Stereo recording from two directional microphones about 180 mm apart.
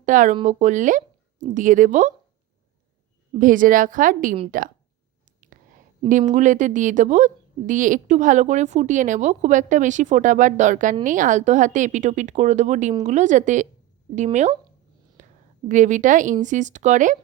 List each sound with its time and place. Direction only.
0.0 s a woman's voice: 45° right (ahead or behind)
3.3 s a woman's voice: 50° right (ahead or behind)
5.4 s whispering: 45° right (ahead or behind)
6.1 s a woman's voice: 45° right (ahead or behind)
15.2 s a sound: 40° right (ahead or behind)
15.7 s a woman's voice: 45° right (ahead or behind)